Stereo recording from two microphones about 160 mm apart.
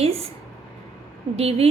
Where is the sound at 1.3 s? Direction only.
40° right (ahead or behind).